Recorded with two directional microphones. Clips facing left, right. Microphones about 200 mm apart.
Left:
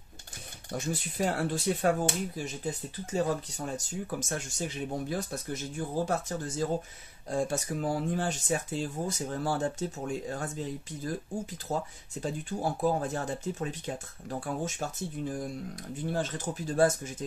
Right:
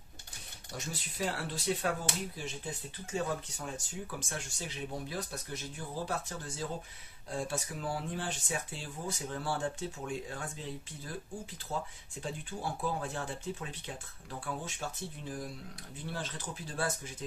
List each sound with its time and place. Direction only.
0.7 s speech: 50° left (ahead or behind)
11.7 s speech: 40° left (ahead or behind)